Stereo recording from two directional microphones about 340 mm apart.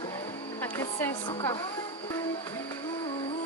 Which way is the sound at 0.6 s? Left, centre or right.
Centre.